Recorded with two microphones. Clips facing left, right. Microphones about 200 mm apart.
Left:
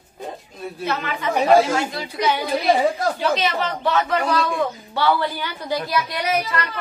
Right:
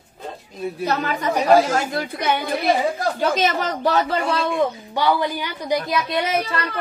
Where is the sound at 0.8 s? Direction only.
40° right (ahead or behind).